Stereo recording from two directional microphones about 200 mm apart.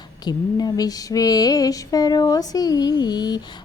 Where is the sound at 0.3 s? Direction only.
20° left (ahead or behind).